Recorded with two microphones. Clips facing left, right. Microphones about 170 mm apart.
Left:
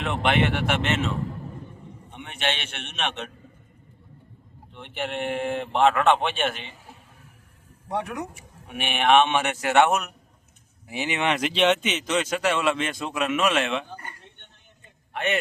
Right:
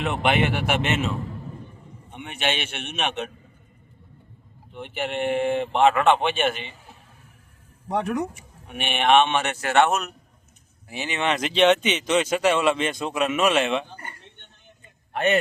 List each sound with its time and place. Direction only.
0.0 s a man's voice: 5° right (ahead or behind)
2.0 s a man's voice: 5° right (ahead or behind)
4.7 s speech: 5° right (ahead or behind)
8.4 s speech: 5° left (ahead or behind)
15.1 s a sound: 40° right (ahead or behind)